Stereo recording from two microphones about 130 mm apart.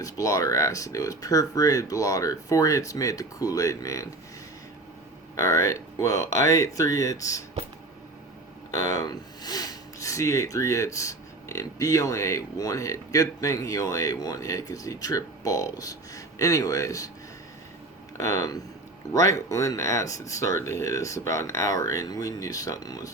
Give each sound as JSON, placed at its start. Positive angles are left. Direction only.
{"t": 0.0, "sound": "speech", "side_deg": 25}
{"t": 5.4, "sound": "speech", "side_deg": 25}
{"t": 8.7, "sound": "speech", "side_deg": 25}
{"t": 18.2, "sound": "speech", "side_deg": 25}